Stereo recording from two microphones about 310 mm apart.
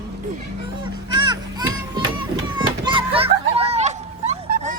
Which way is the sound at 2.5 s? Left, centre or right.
Centre.